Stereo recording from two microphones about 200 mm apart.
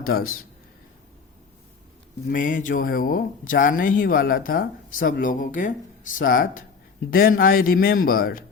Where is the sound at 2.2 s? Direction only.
40° left (ahead or behind).